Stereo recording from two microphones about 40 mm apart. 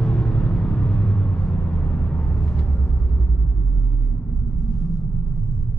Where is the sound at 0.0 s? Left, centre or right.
Left.